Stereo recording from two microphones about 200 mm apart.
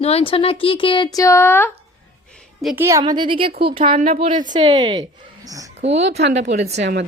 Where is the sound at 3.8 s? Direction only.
30° right (ahead or behind).